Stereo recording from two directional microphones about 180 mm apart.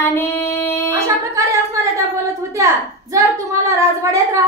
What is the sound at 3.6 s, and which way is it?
Speech, 15° right (ahead or behind).